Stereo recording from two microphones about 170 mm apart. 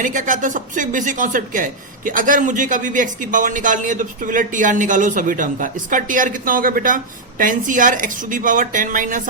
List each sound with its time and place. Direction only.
0.0 s speech: 50° right (ahead or behind)